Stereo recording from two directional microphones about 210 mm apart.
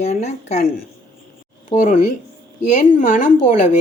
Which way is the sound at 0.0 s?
35° left (ahead or behind).